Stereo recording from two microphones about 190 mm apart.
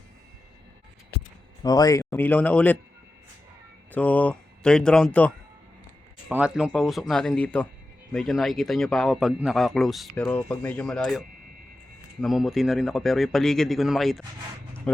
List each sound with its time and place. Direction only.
1.6 s speech: 20° left (ahead or behind)
3.9 s a man's voice: 10° left (ahead or behind)